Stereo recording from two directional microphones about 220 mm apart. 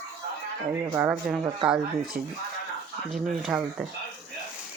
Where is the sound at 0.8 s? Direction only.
10° right (ahead or behind).